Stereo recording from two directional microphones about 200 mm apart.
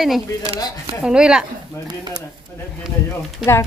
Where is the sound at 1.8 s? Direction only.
20° right (ahead or behind).